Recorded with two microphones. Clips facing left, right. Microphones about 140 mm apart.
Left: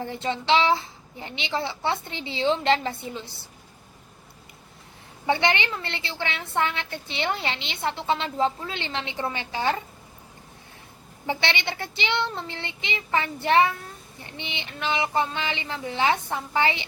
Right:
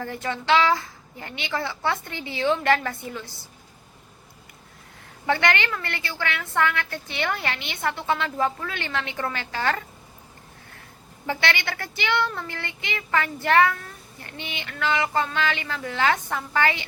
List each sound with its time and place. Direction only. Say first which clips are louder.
0.0 s a woman's voice: left 1 dB; 20° left (ahead or behind)
5.2 s a woman's voice: even; 20° left (ahead or behind)
11.3 s a woman's voice: right 1 dB; 20° left (ahead or behind)